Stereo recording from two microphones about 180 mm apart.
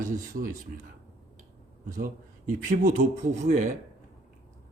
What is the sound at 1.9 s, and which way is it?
Speech, 50° right (ahead or behind).